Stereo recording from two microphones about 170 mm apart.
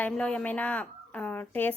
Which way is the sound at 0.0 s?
5° left (ahead or behind).